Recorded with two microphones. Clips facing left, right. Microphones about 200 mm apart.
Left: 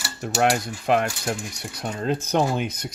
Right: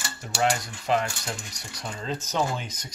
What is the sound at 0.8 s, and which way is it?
Coin, 55° left (ahead or behind).